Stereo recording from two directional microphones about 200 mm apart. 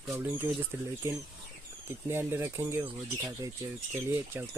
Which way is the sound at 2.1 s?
10° right (ahead or behind).